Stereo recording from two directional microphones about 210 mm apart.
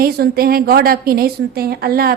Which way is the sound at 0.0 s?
45° right (ahead or behind).